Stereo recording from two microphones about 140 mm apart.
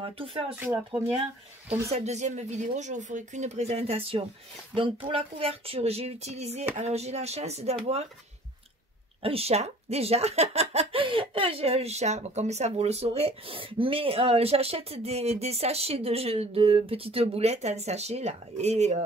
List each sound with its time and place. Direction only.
0.0 s speech: 40° right (ahead or behind)
0.6 s speech: 15° right (ahead or behind)
1.9 s speech: 50° right (ahead or behind)
9.2 s speech: 45° right (ahead or behind)